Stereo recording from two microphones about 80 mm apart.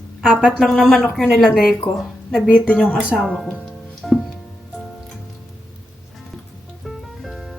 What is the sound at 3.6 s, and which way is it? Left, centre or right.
Music, centre.